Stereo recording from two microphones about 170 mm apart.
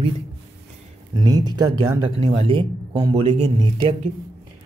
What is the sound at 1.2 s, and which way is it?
Speech, 25° right (ahead or behind).